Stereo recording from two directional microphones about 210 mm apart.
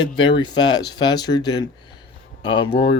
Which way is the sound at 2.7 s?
50° left (ahead or behind).